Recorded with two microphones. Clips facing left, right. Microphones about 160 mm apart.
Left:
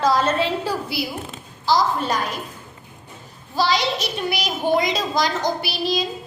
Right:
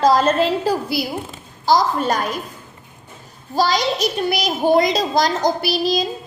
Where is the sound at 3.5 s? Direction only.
45° right (ahead or behind).